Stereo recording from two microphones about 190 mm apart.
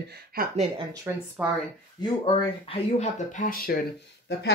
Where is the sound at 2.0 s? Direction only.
25° left (ahead or behind); by 4.5 s 55° left (ahead or behind).